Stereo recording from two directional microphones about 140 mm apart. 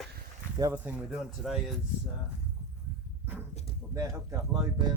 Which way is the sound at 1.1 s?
Centre (ahead or behind).